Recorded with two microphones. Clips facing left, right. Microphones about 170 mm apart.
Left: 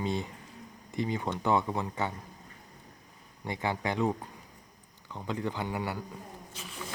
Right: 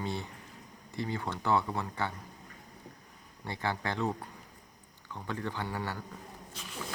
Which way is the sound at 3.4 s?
15° left (ahead or behind).